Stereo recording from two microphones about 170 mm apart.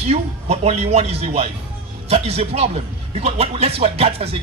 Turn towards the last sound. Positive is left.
turn(degrees=-35)  # may be behind; listen again after turning